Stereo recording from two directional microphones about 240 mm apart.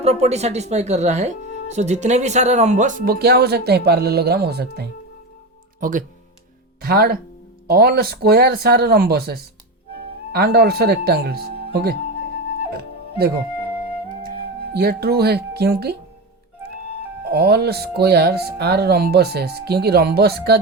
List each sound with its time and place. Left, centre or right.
0.0 s speech: right
12.7 s music: right
14.7 s speech: right
17.2 s speech: right